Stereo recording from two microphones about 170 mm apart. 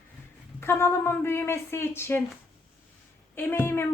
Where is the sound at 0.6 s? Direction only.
15° left (ahead or behind).